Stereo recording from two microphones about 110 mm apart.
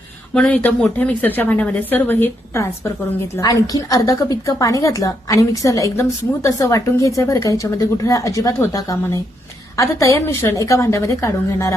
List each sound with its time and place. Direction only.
0.3 s a woman's voice: 10° left (ahead or behind); by 11.7 s 30° left (ahead or behind)